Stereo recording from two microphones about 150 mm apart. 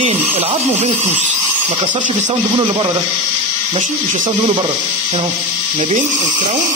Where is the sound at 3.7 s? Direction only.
55° right (ahead or behind).